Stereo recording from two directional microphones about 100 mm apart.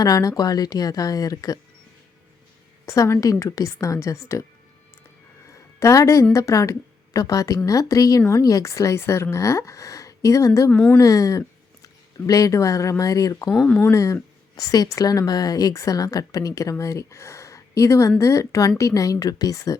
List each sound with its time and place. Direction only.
0.0 s a woman's voice: 40° left (ahead or behind)
2.8 s a woman's voice: 30° left (ahead or behind)
5.8 s a woman's voice: 30° left (ahead or behind)
10.7 s speech: 10° left (ahead or behind)
10.9 s speech: 35° left (ahead or behind)
13.7 s speech: 20° left (ahead or behind)
13.9 s a woman's voice: 30° left (ahead or behind)